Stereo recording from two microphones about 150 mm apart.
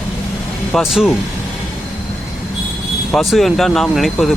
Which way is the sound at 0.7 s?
Centre (ahead or behind).